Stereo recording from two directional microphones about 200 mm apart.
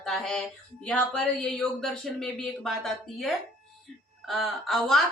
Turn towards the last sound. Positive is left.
turn(degrees=0)  # may be behind; listen again after turning